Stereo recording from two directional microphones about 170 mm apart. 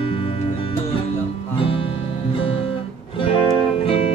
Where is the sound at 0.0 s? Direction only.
30° left (ahead or behind).